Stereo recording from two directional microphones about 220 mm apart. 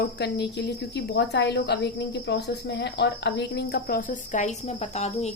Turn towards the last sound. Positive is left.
turn(degrees=30)  # may be behind; listen again after turning